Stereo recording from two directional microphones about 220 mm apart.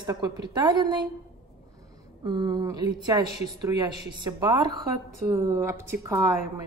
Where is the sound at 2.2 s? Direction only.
20° right (ahead or behind).